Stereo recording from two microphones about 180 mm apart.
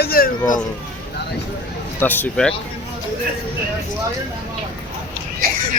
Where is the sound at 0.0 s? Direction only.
55° left (ahead or behind).